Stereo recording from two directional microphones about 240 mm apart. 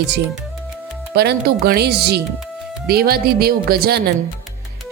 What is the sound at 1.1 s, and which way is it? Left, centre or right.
Speech, right.